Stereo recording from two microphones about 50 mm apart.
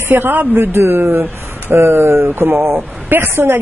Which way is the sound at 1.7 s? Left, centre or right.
Right.